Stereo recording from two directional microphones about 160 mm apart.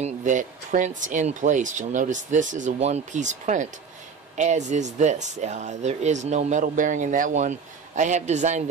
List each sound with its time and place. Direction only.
0.0 s speech: 50° right (ahead or behind)